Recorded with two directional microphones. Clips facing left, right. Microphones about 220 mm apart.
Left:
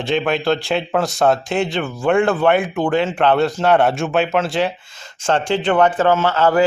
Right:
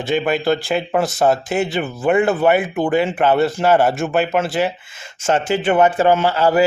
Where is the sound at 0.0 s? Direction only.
Centre (ahead or behind).